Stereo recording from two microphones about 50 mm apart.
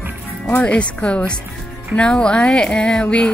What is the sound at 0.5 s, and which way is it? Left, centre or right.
Speech, left.